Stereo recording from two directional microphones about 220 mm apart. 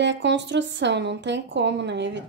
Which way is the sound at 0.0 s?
55° right (ahead or behind).